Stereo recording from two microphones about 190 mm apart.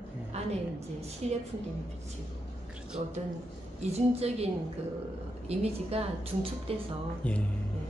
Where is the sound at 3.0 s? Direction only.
35° right (ahead or behind).